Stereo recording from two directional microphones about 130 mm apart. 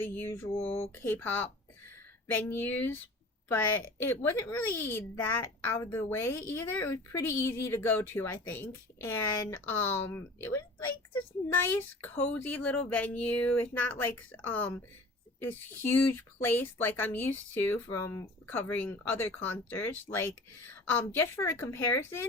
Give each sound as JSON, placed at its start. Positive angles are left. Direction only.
{"t": 0.0, "sound": "a sound", "side_deg": 20}
{"t": 0.6, "sound": "speech", "side_deg": 50}
{"t": 0.9, "sound": "a child's voice", "side_deg": 15}